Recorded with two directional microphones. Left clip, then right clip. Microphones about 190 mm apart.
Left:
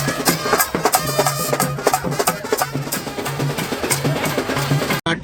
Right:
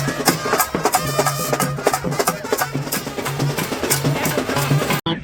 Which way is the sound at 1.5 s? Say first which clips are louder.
Even; 15° right (ahead or behind).